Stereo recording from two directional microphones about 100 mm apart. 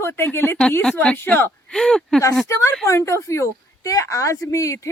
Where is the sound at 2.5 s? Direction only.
25° left (ahead or behind).